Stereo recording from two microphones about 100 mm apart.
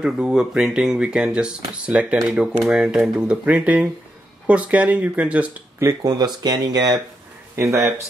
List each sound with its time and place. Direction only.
0.0 s speech: 5° right (ahead or behind)
5.8 s speech: 30° right (ahead or behind)
6.1 s speech: 45° right (ahead or behind)
7.5 s speech: 30° right (ahead or behind)